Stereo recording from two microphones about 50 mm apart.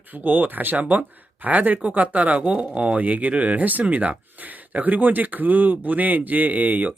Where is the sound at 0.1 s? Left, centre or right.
Right.